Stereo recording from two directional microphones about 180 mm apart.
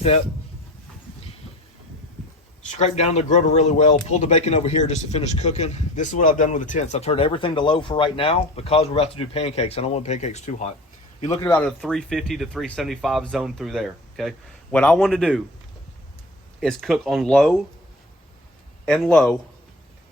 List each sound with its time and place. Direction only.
2.6 s speech: 40° left (ahead or behind)
11.4 s speech: 15° left (ahead or behind)
11.8 s speech: centre (ahead or behind)
16.6 s speech: centre (ahead or behind)
18.9 s speech: 5° left (ahead or behind)